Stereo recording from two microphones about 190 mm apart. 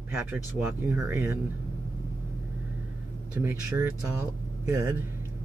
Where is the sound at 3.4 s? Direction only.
15° right (ahead or behind).